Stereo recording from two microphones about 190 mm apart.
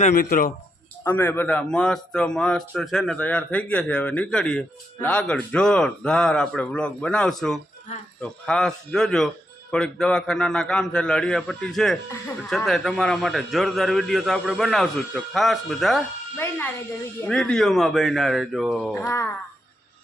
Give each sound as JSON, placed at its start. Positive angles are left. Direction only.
{"t": 0.0, "sound": "speech", "side_deg": 45}
{"t": 1.0, "sound": "a man's voice", "side_deg": 10}
{"t": 17.2, "sound": "a man's voice", "side_deg": 5}
{"t": 19.0, "sound": "speech", "side_deg": 15}